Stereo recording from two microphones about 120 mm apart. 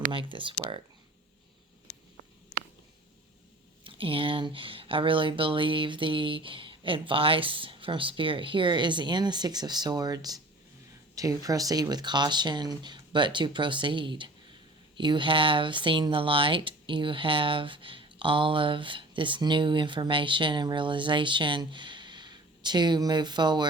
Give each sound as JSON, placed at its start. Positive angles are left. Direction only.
{"t": 0.1, "sound": "speech", "side_deg": -45}
{"t": 3.8, "sound": "speech", "side_deg": -50}